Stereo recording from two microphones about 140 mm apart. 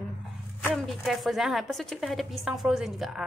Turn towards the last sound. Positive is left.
turn(degrees=-5)  # may be behind; listen again after turning